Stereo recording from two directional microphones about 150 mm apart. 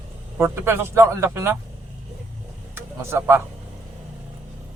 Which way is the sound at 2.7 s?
15° right (ahead or behind).